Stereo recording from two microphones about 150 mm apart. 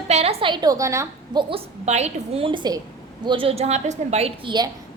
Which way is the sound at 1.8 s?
45° right (ahead or behind).